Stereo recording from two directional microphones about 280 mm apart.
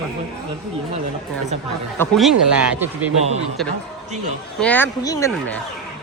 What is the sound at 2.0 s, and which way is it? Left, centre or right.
Speech, centre.